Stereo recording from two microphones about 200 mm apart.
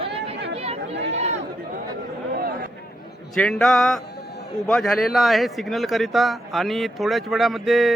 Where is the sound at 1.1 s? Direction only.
35° right (ahead or behind).